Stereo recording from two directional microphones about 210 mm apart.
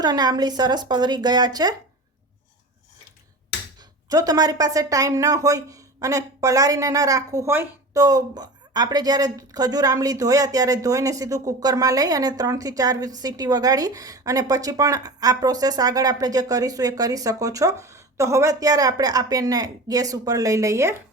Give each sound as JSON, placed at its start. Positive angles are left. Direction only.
{"t": 0.0, "sound": "a woman's voice", "side_deg": -20}
{"t": 3.8, "sound": "speech", "side_deg": -15}